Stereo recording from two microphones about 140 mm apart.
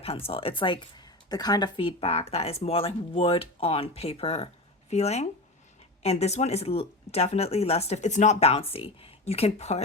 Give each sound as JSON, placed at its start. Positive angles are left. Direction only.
{"t": 0.0, "sound": "speech", "side_deg": 45}